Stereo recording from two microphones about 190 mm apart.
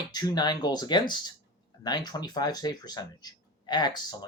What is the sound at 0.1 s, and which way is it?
Speech, 20° left (ahead or behind).